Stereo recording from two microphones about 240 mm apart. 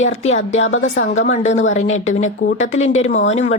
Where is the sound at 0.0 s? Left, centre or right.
Left.